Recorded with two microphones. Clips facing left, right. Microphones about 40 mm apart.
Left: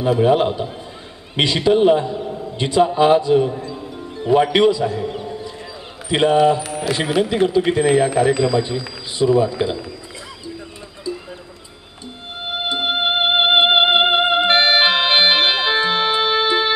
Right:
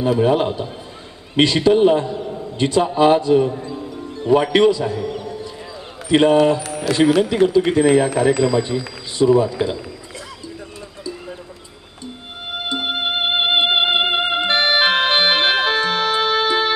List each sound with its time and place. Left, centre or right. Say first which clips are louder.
0.0 s a man's voice: left 1 dB; centre
2.3 s a sound: left 1 dB; centre
3.0 s a man's voice: right 2 dB; centre
3.9 s music: right 1 dB; centre
4.3 s a man's voice: even; centre
4.9 s a sound: even; centre
6.0 s a man's voice: right 1 dB; centre
12.7 s music: left 2 dB; centre
13.7 s music: left 3 dB; centre
13.9 s music: left 3 dB; centre
14.5 s organ: left 1 dB; left
14.8 s organ: even; left
15.5 s music: even; left